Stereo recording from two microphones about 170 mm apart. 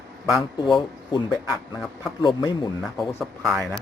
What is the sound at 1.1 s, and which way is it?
Speech, 25° left (ahead or behind).